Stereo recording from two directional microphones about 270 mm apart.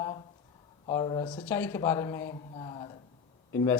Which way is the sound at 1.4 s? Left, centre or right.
Centre.